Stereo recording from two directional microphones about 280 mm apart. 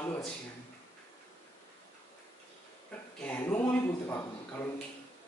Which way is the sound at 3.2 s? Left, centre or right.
Centre.